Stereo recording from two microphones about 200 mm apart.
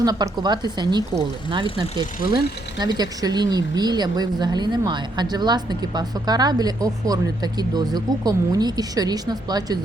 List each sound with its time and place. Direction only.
0.0 s speech: 20° right (ahead or behind)